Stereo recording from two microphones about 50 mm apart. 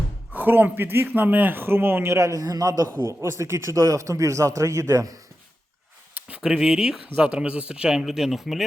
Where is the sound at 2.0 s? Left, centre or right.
Right.